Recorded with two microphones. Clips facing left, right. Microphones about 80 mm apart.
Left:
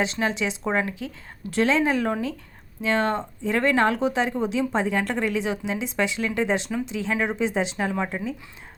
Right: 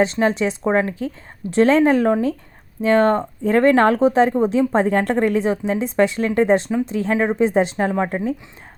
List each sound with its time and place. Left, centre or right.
0.0 s speech: right